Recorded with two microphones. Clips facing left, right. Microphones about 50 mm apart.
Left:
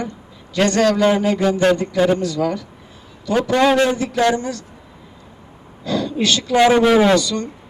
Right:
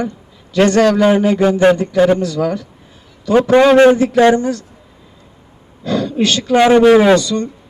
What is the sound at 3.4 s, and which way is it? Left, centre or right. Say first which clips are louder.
A man's voice: right 8 dB; right.